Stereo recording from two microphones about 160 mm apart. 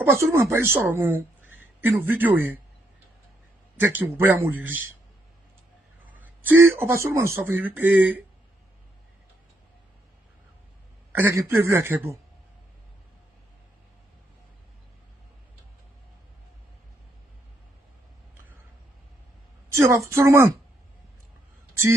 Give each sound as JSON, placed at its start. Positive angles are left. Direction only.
{"t": 0.0, "sound": "speech", "side_deg": -15}
{"t": 3.8, "sound": "speech", "side_deg": -10}
{"t": 6.1, "sound": "speech", "side_deg": -10}
{"t": 11.1, "sound": "speech", "side_deg": -15}
{"t": 19.7, "sound": "speech", "side_deg": -15}